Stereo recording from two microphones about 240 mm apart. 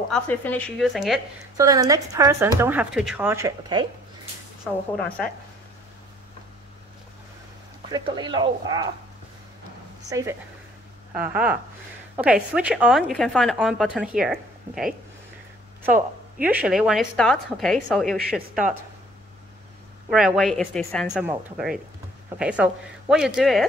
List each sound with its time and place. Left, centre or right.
0.1 s a woman's voice: centre
1.6 s a woman's voice: centre
7.9 s speech: centre
10.0 s a woman's voice: centre
16.3 s a woman's voice: centre
20.1 s a woman's voice: centre